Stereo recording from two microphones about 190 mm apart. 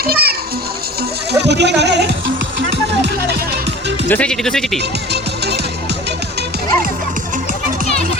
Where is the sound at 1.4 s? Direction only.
65° right (ahead or behind).